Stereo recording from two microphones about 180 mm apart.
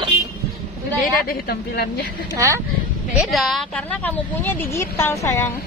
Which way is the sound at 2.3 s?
15° right (ahead or behind).